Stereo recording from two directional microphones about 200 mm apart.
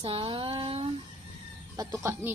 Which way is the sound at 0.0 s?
25° right (ahead or behind).